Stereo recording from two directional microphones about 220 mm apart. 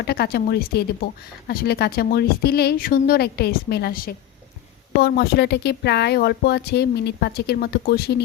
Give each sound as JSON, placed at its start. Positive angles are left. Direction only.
{"t": 0.0, "sound": "speech", "side_deg": 45}